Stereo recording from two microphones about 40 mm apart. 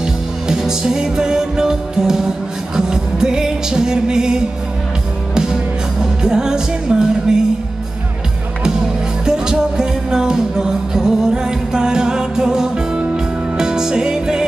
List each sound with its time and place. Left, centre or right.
0.0 s music: centre
9.2 s music: centre